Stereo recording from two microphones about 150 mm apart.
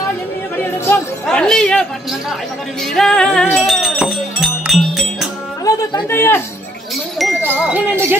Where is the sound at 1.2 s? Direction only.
5° left (ahead or behind).